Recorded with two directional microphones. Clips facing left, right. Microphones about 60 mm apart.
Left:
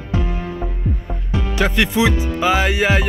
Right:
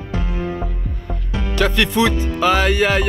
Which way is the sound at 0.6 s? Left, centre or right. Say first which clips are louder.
Left 1 dB; centre.